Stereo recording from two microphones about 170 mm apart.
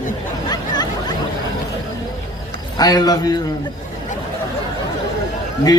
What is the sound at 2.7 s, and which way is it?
Speech, 25° left (ahead or behind).